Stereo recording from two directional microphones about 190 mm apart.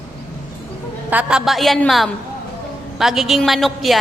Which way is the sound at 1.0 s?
5° right (ahead or behind).